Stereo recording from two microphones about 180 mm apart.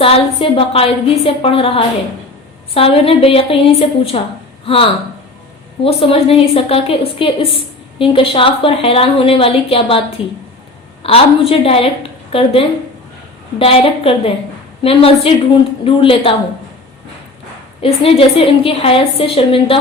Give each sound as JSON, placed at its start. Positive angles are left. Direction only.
{"t": 0.0, "sound": "a woman's voice", "side_deg": 30}
{"t": 17.7, "sound": "a woman's voice", "side_deg": 35}